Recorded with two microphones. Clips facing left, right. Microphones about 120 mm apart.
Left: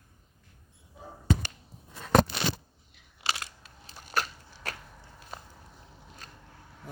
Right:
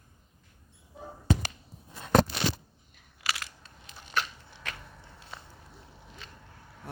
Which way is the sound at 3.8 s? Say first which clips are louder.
Left 1 dB; 40° left (ahead or behind).